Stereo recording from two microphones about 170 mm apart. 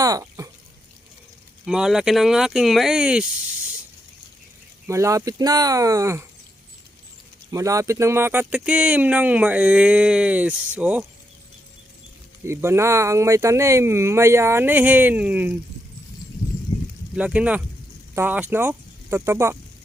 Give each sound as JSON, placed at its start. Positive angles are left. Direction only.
{"t": 0.0, "sound": "a sound", "side_deg": -20}
{"t": 1.6, "sound": "speech", "side_deg": -5}
{"t": 4.9, "sound": "speech", "side_deg": -20}
{"t": 7.5, "sound": "speech", "side_deg": -20}
{"t": 12.5, "sound": "speech", "side_deg": -15}
{"t": 17.2, "sound": "speech", "side_deg": -5}